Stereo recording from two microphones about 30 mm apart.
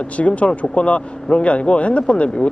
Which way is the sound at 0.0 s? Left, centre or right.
Left.